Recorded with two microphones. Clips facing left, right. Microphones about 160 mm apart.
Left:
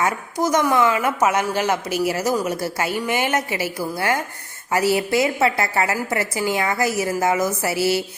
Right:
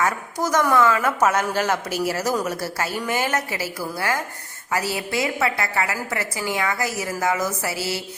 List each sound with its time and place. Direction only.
0.0 s a woman's voice: 20° left (ahead or behind)